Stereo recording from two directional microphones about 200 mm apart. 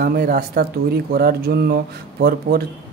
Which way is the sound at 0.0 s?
45° right (ahead or behind).